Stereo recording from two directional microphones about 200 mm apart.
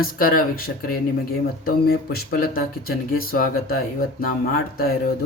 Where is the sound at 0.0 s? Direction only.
45° left (ahead or behind).